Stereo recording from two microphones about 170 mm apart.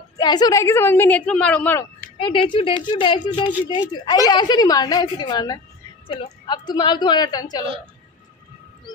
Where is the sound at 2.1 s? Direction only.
30° left (ahead or behind).